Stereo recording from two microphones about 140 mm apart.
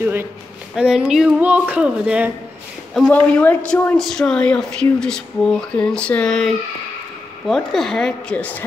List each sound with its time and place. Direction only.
0.0 s speech: 15° right (ahead or behind)
0.7 s speech: 5° right (ahead or behind)
3.1 s speech: 10° left (ahead or behind)